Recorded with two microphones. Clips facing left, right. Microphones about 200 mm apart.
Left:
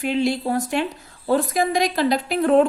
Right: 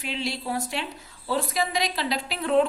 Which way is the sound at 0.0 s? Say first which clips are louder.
Left 10 dB; 50° left (ahead or behind).